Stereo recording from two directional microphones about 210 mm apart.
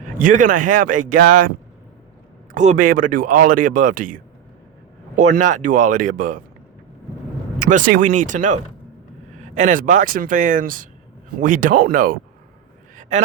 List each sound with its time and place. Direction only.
0.2 s speech: 40° right (ahead or behind)
2.6 s speech: 35° right (ahead or behind)
7.6 s speech: 40° right (ahead or behind)
13.0 s a sound: 35° right (ahead or behind)